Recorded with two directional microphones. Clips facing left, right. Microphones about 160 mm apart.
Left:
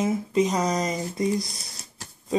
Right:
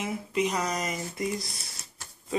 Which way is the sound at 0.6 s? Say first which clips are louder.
Left 5 dB; 20° left (ahead or behind).